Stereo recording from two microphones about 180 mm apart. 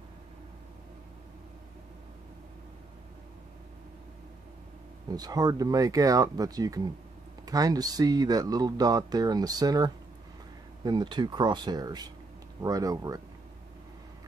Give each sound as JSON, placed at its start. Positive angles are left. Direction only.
{"t": 5.1, "sound": "speech", "side_deg": -20}